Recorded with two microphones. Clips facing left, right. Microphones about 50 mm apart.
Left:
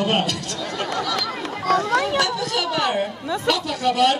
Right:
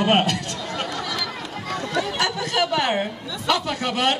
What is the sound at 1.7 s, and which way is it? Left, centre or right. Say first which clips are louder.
Children playing: left 7 dB; left.